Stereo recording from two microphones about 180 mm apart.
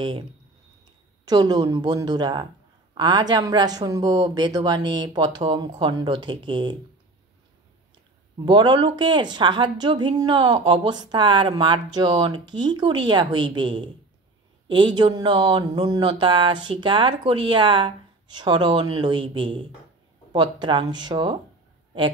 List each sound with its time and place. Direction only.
1.2 s speech: 20° right (ahead or behind)
8.5 s speech: 25° right (ahead or behind)